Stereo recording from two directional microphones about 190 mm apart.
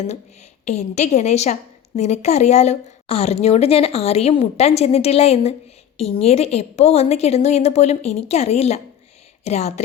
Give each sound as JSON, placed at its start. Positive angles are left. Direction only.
{"t": 0.6, "sound": "a woman's voice", "side_deg": 35}